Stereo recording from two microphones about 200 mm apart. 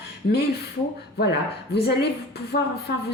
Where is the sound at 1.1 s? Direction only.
55° left (ahead or behind).